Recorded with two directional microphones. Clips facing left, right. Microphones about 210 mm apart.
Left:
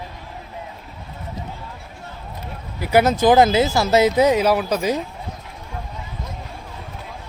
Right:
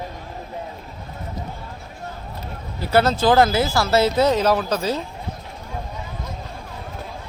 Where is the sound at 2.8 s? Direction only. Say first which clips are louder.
Left 2 dB; 15° left (ahead or behind).